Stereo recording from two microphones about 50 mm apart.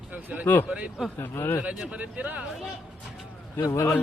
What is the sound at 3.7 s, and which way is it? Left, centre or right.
Speech, left.